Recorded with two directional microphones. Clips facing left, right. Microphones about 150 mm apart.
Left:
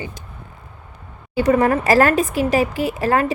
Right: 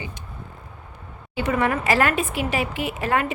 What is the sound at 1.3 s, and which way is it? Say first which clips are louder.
A woman's voice: left 7 dB; 40° left (ahead or behind).